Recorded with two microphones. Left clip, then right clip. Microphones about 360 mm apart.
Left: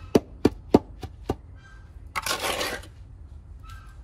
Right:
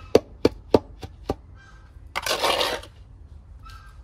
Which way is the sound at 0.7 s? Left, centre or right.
Centre.